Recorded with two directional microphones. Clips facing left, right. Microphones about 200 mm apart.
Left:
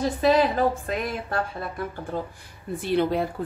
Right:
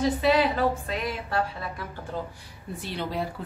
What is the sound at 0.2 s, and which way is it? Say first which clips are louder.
A woman's voice: left 6 dB; 45° left (ahead or behind).